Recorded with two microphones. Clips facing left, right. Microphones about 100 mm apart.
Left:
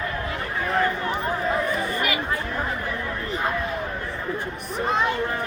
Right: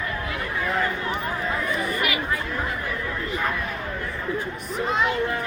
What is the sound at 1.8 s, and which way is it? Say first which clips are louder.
Chatter: even; 30° left (ahead or behind).